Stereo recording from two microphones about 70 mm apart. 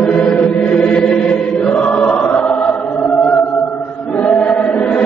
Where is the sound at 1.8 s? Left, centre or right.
Centre.